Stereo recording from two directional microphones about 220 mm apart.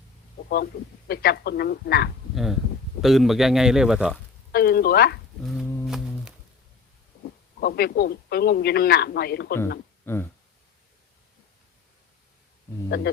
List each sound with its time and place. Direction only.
0.4 s a man's voice: 45° left (ahead or behind)
2.3 s speech: centre (ahead or behind)
4.5 s a man's voice: 45° left (ahead or behind)
5.4 s speech: centre (ahead or behind)
5.8 s humming: centre (ahead or behind)
7.6 s a man's voice: 45° left (ahead or behind)
10.1 s speech: 10° left (ahead or behind)